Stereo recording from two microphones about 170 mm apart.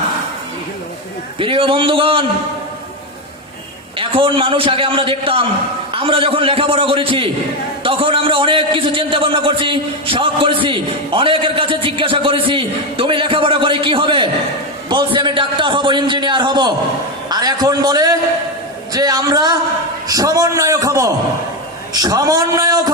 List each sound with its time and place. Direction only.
1.4 s a man's voice: 30° right (ahead or behind)
3.9 s a man's voice: 30° right (ahead or behind)